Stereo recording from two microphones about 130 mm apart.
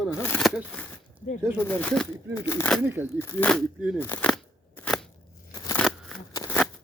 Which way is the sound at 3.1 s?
20° left (ahead or behind).